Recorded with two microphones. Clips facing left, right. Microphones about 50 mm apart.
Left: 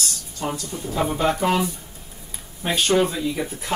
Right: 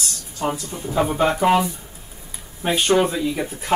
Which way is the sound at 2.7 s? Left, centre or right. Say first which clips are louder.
Right 2 dB; centre.